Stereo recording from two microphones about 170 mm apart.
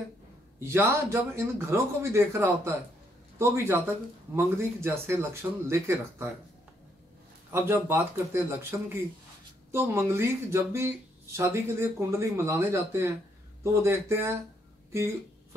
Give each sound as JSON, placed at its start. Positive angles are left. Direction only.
{"t": 0.6, "sound": "speech", "side_deg": -15}
{"t": 7.5, "sound": "speech", "side_deg": -15}